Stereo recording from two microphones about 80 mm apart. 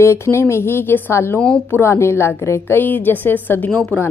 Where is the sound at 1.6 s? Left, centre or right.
Left.